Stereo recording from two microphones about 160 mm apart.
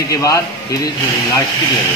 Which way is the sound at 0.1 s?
20° left (ahead or behind).